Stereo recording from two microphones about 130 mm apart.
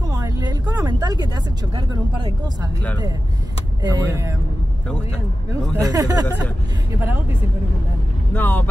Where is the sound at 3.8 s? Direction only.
25° right (ahead or behind).